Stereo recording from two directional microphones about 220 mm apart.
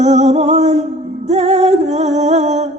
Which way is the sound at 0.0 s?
30° right (ahead or behind).